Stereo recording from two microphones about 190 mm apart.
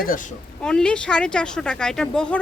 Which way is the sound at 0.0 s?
45° left (ahead or behind).